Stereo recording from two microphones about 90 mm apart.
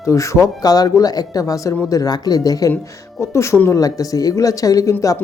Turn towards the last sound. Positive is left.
turn(degrees=40)  # may be behind; listen again after turning